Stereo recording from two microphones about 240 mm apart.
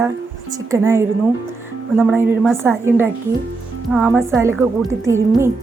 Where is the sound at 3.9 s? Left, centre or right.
Centre.